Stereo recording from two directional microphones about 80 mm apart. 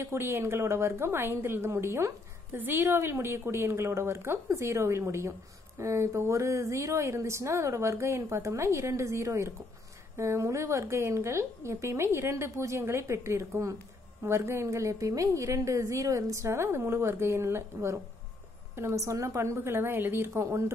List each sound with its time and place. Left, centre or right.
0.0 s a woman's voice: right